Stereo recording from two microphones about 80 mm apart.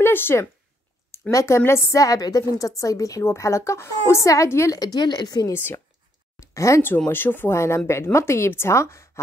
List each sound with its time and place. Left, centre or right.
0.0 s a woman's voice: left
4.7 s speech: left
5.5 s speech: left
6.4 s speech: left
7.1 s a woman's voice: left